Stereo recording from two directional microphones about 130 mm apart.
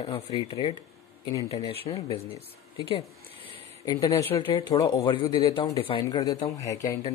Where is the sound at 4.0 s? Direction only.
25° left (ahead or behind); by 6.0 s 45° left (ahead or behind).